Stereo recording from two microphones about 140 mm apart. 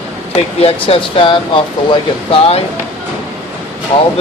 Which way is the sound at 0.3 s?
45° left (ahead or behind).